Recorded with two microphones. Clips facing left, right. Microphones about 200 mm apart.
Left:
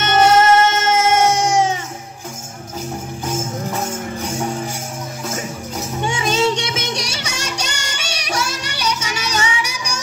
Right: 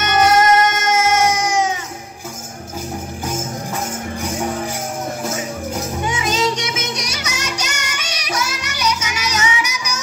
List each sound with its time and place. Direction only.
0.0 s music: 25° left (ahead or behind)
6.0 s music: 30° left (ahead or behind)